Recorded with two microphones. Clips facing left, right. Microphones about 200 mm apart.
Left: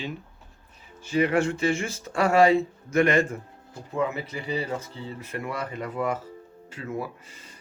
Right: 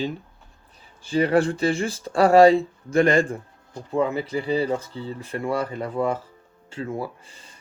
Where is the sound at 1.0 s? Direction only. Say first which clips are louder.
Right 3 dB; 35° right (ahead or behind).